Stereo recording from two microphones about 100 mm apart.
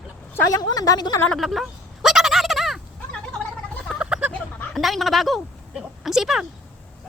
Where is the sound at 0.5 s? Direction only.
35° left (ahead or behind).